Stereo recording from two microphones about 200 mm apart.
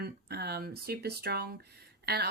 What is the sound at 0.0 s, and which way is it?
Speech, 55° right (ahead or behind).